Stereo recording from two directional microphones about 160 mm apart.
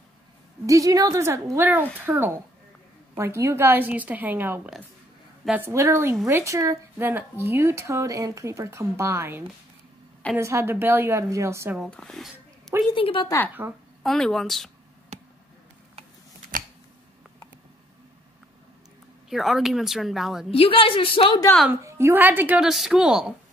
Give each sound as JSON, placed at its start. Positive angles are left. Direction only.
{"t": 0.7, "sound": "a woman's voice", "side_deg": -20}
{"t": 5.7, "sound": "speech", "side_deg": -20}
{"t": 11.7, "sound": "speech", "side_deg": 0}
{"t": 12.9, "sound": "a woman's voice", "side_deg": 35}
{"t": 13.6, "sound": "speech", "side_deg": -15}
{"t": 14.0, "sound": "speech", "side_deg": 0}
{"t": 15.1, "sound": "a sound", "side_deg": -45}
{"t": 16.5, "sound": "scissors", "side_deg": -60}
{"t": 19.2, "sound": "speech", "side_deg": 0}
{"t": 20.5, "sound": "a woman's voice", "side_deg": 35}
{"t": 21.8, "sound": "speech", "side_deg": -15}